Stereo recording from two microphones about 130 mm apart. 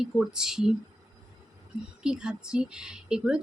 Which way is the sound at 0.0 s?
5° right (ahead or behind).